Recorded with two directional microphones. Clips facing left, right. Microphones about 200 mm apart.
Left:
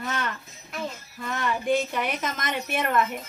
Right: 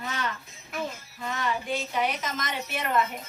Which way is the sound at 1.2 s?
50° left (ahead or behind).